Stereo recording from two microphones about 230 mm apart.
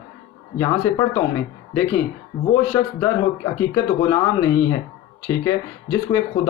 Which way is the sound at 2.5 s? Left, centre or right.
Centre.